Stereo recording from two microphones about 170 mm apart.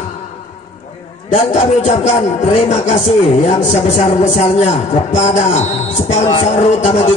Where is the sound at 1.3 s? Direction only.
45° left (ahead or behind).